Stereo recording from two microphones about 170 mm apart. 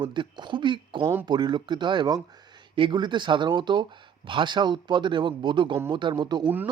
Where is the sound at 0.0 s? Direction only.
25° right (ahead or behind).